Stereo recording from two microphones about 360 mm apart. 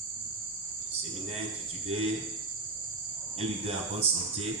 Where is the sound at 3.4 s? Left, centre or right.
Centre.